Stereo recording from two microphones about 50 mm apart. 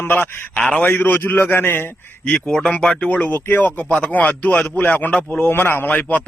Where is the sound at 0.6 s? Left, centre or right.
Left.